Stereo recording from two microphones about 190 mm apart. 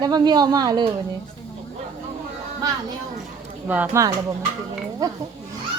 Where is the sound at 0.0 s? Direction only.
20° right (ahead or behind).